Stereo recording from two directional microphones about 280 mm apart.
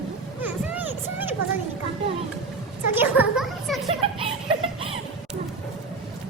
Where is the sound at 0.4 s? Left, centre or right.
Centre.